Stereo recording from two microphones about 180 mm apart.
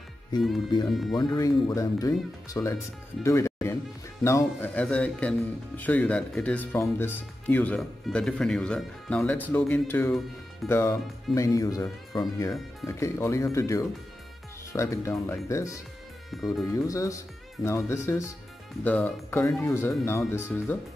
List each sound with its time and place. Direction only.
0.8 s speech: centre (ahead or behind)
1.1 s speech: 20° left (ahead or behind)
3.3 s music: 15° left (ahead or behind)
4.2 s speech: 15° left (ahead or behind)
16.3 s speech: centre (ahead or behind)
16.7 s speech: 20° left (ahead or behind)